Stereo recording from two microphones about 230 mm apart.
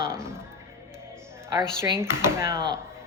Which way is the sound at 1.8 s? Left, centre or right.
Centre.